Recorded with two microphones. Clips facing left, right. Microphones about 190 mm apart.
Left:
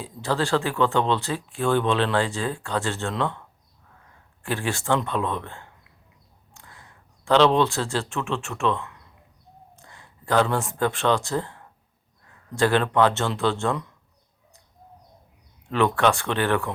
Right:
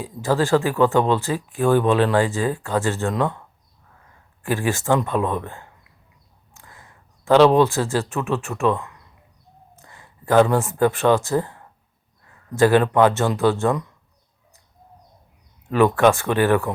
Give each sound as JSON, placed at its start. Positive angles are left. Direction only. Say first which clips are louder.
{"t": 0.0, "sound": "speech", "louder": "right 5 dB", "side_deg": -15}
{"t": 4.4, "sound": "speech", "louder": "right 4 dB", "side_deg": -15}
{"t": 7.3, "sound": "speech", "louder": "right 5 dB", "side_deg": -10}
{"t": 10.3, "sound": "speech", "louder": "right 6 dB", "side_deg": -15}
{"t": 12.6, "sound": "speech", "louder": "right 5 dB", "side_deg": -10}
{"t": 15.7, "sound": "speech", "louder": "right 5 dB", "side_deg": -15}